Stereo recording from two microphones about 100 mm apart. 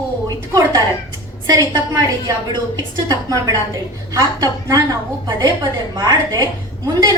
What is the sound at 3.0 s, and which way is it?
A woman's voice, 40° right (ahead or behind).